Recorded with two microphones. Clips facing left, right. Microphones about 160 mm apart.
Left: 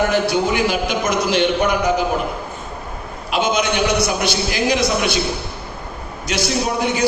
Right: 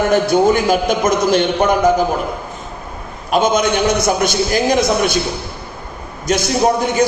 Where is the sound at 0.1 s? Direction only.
45° right (ahead or behind).